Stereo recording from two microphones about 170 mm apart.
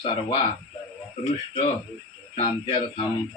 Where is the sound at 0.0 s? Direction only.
30° left (ahead or behind).